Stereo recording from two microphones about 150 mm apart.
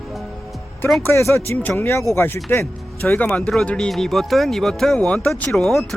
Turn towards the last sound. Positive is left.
turn(degrees=0)  # may be behind; listen again after turning